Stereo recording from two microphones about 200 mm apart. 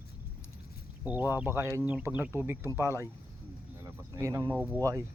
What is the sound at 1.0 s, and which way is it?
Speech, 10° right (ahead or behind).